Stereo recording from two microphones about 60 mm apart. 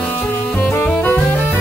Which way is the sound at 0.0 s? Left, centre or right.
Left.